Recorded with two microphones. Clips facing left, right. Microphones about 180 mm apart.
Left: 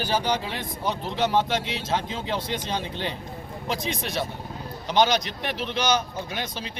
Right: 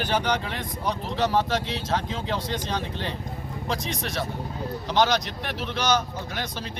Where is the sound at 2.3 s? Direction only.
25° left (ahead or behind).